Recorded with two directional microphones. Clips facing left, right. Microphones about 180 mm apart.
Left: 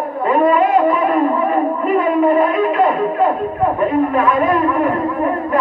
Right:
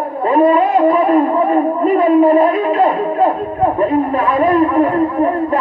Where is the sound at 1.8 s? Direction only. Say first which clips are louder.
Right 5 dB; 30° right (ahead or behind).